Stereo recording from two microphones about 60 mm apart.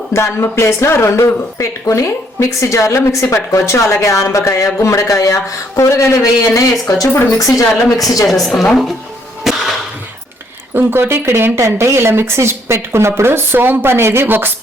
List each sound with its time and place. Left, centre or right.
0.1 s speech: left
7.1 s speech: left
7.3 s a woman's voice: left
8.3 s a woman's voice: centre
9.4 s music: centre
10.8 s a woman's voice: right